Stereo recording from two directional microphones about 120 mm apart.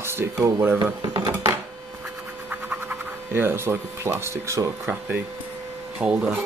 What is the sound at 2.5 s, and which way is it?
Speech, 10° right (ahead or behind).